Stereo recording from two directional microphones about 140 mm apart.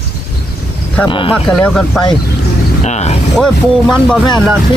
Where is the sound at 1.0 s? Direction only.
35° left (ahead or behind).